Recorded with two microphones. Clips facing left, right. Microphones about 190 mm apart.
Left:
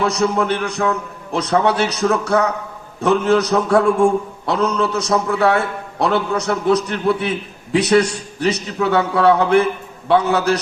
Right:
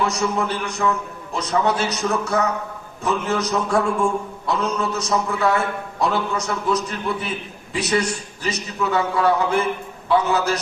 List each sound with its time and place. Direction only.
0.0 s a man's voice: 65° left (ahead or behind)